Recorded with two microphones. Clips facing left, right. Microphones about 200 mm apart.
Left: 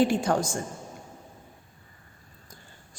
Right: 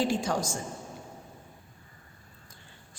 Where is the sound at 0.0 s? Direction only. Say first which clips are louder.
Left 5 dB; 55° left (ahead or behind).